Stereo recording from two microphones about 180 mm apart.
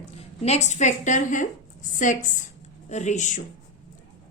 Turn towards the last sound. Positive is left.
turn(degrees=40)  # may be behind; listen again after turning